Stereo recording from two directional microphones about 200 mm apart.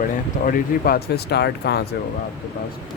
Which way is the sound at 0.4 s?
50° left (ahead or behind).